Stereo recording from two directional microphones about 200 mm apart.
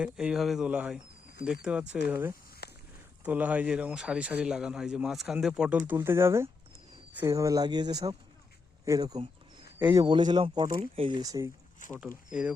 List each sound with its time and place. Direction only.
0.0 s speech: 5° right (ahead or behind)
2.6 s a sound: 55° left (ahead or behind)
3.2 s speech: 10° right (ahead or behind)
11.8 s speech: 40° left (ahead or behind)
12.3 s speech: 5° right (ahead or behind)